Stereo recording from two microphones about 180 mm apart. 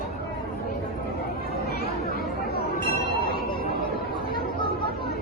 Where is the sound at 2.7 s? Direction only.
55° left (ahead or behind).